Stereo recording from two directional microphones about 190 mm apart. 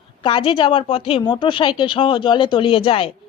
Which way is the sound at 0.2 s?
25° left (ahead or behind).